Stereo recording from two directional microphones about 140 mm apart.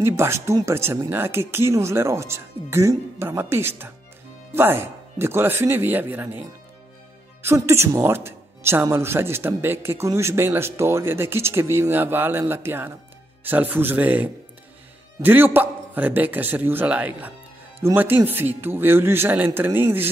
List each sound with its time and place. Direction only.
0.0 s a woman's voice: 20° right (ahead or behind)
7.4 s a woman's voice: 20° right (ahead or behind)